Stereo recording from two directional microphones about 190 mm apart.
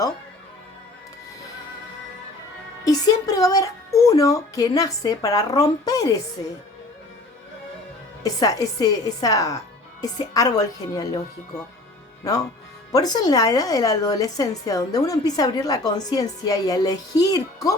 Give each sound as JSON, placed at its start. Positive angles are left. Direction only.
{"t": 2.8, "sound": "speech", "side_deg": 20}
{"t": 8.2, "sound": "a woman's voice", "side_deg": 20}
{"t": 12.2, "sound": "a woman's voice", "side_deg": 20}